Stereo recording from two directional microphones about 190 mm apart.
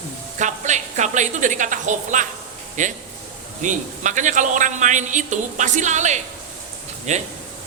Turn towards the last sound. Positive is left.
turn(degrees=-40)  # may be behind; listen again after turning